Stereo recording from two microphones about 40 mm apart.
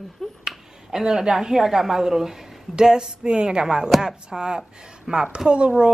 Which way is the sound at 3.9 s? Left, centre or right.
Centre.